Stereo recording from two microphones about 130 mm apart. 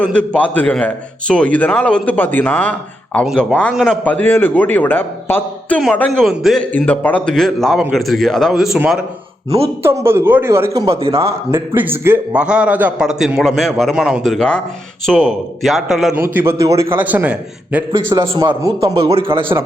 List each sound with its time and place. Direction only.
0.0 s a man's voice: 10° left (ahead or behind)
6.7 s a man's voice: 15° left (ahead or behind); by 9.0 s 5° right (ahead or behind)
9.8 s a man's voice: 20° right (ahead or behind); by 16.1 s centre (ahead or behind)
16.2 s a man's voice: 20° right (ahead or behind)
18.1 s speech: 25° right (ahead or behind)
19.1 s speech: 45° right (ahead or behind)